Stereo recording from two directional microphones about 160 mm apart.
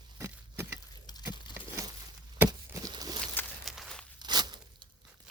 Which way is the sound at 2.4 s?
25° right (ahead or behind).